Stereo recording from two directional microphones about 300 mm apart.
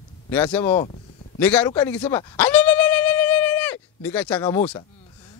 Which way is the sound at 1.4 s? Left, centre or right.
Centre.